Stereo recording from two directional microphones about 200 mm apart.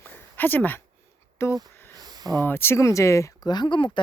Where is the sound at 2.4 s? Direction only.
10° left (ahead or behind).